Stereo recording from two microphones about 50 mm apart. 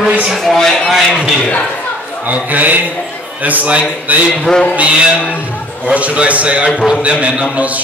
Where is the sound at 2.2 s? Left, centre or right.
Right.